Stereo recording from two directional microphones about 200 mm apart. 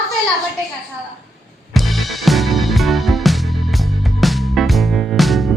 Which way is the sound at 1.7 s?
Centre (ahead or behind).